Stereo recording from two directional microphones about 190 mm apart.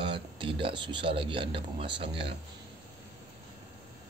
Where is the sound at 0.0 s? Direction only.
25° right (ahead or behind).